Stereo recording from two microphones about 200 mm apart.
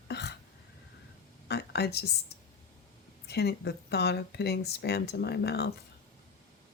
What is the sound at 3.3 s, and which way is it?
Speech, 55° left (ahead or behind).